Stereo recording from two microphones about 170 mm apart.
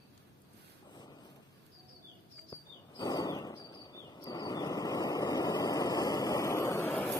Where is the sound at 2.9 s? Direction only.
20° left (ahead or behind).